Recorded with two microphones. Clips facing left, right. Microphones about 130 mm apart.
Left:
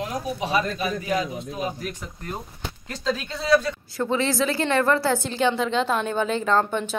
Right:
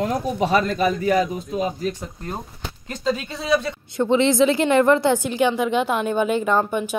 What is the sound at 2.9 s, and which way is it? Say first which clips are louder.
Speech: right 3 dB; 15° right (ahead or behind).